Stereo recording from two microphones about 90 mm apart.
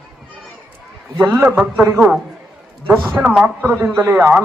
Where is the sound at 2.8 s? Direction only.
15° right (ahead or behind).